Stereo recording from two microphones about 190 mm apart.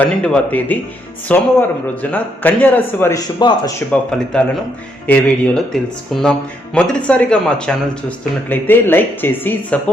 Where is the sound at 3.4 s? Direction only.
20° left (ahead or behind).